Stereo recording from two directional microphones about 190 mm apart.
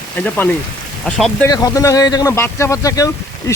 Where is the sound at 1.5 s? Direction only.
20° left (ahead or behind).